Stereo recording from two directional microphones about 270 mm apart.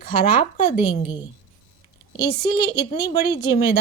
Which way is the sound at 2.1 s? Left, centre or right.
Left.